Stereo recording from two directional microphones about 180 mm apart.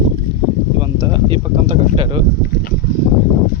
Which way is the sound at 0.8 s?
25° right (ahead or behind).